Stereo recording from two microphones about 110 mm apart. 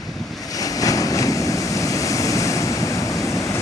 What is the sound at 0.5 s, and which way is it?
Waves, 35° left (ahead or behind).